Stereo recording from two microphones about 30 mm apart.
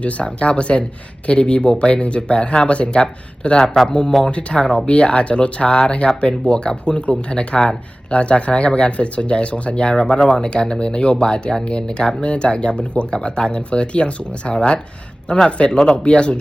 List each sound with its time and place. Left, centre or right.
0.0 s speech: left
2.9 s speech: left
4.3 s speech: left
4.5 s speech: left
9.7 s speech: left